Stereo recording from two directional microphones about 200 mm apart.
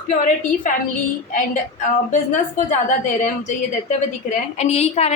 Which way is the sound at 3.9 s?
35° left (ahead or behind).